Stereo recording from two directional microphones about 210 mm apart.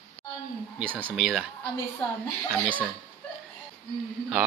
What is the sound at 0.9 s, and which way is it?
Speech, centre (ahead or behind).